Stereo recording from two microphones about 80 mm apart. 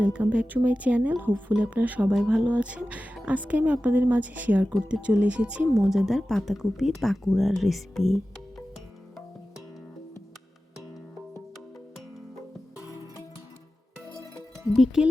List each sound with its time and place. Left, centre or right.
0.0 s speech: centre
5.9 s speech: centre
14.7 s speech: centre